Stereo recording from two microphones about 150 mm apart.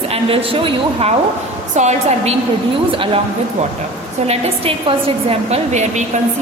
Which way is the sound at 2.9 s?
35° right (ahead or behind).